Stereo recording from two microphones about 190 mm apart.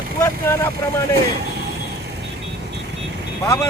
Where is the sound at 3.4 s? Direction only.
15° left (ahead or behind).